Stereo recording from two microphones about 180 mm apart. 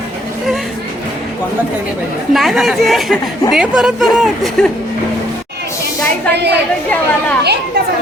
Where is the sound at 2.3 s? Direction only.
Centre (ahead or behind).